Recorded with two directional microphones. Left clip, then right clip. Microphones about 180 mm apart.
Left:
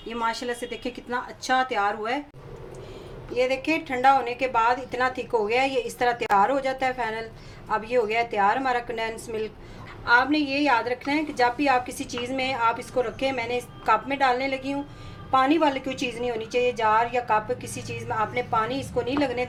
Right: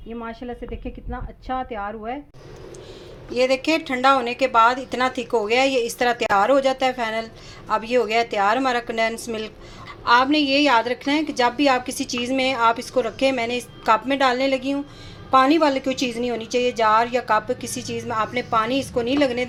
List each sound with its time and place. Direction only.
0.2 s a woman's voice: 35° right (ahead or behind)
3.3 s a woman's voice: 35° right (ahead or behind)